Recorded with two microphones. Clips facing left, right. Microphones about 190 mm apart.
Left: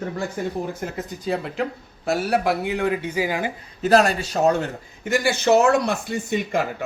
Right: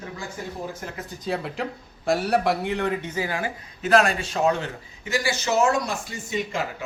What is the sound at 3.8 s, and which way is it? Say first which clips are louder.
A man's voice: left 3 dB; 35° left (ahead or behind).